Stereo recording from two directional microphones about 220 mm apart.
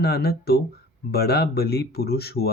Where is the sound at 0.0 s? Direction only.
45° left (ahead or behind).